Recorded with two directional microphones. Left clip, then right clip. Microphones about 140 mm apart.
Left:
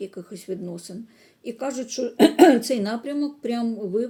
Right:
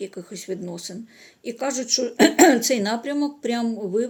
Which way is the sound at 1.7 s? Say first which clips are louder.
Right 4 dB; 10° left (ahead or behind).